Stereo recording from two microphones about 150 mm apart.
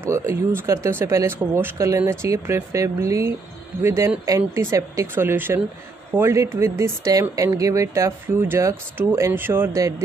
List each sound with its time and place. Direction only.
0.8 s speech: 15° right (ahead or behind)